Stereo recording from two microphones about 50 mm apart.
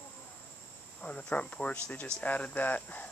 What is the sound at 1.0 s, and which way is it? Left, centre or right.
Speech, left.